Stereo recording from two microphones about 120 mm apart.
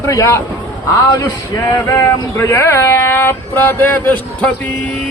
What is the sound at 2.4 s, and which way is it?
Speech, 20° left (ahead or behind).